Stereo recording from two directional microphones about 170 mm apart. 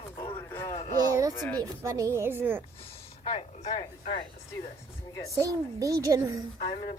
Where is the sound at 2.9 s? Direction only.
35° left (ahead or behind).